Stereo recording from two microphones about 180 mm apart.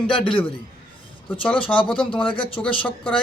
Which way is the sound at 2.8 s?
10° left (ahead or behind).